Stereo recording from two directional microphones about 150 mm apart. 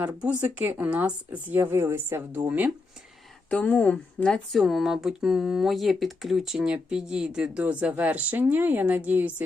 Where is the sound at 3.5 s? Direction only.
10° left (ahead or behind).